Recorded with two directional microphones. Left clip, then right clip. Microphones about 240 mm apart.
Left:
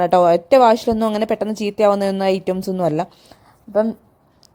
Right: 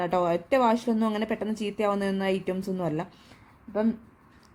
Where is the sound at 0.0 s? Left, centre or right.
Left.